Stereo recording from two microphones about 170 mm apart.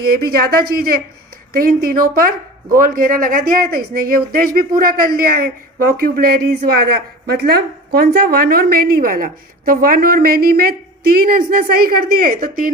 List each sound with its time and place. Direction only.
0.0 s speech: 65° right (ahead or behind)